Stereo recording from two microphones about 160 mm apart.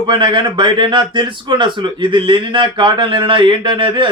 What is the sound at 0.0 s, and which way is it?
A man's voice, 30° right (ahead or behind).